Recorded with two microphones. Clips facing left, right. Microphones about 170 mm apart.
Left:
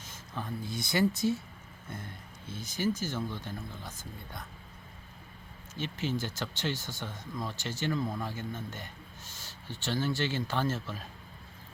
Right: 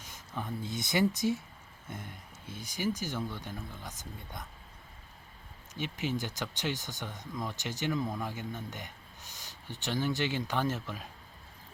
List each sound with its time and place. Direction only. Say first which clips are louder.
0.0 s a man's voice: even; 15° right (ahead or behind)
5.7 s a man's voice: left 1 dB; 15° right (ahead or behind)